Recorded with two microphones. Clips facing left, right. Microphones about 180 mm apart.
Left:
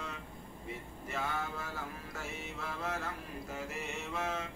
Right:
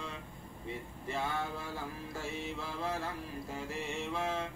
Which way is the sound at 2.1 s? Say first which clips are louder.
Right 4 dB; 30° right (ahead or behind).